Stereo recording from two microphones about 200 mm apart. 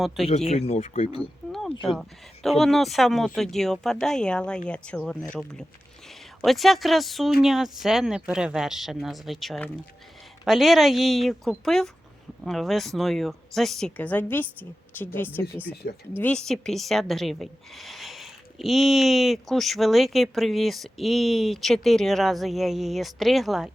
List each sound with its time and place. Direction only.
0.3 s speech: 30° left (ahead or behind)
1.9 s a woman's voice: centre (ahead or behind)